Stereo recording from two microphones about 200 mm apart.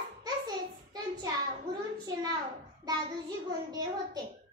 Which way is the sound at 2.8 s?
20° right (ahead or behind).